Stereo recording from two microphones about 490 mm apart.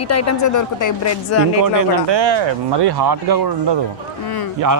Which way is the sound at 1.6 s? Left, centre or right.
Right.